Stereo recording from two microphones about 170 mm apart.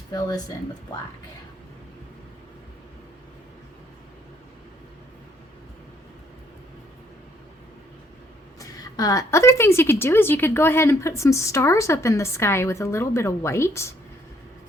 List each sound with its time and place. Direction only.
0.1 s speech: 20° left (ahead or behind)
8.5 s a woman's voice: 20° left (ahead or behind)